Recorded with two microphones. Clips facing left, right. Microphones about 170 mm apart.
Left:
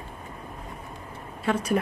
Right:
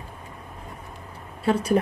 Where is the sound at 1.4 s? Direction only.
30° right (ahead or behind).